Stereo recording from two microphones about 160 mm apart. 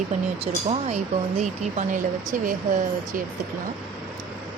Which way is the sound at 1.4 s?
40° right (ahead or behind).